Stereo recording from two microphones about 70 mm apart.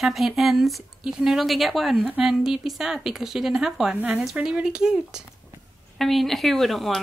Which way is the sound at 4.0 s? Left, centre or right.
Right.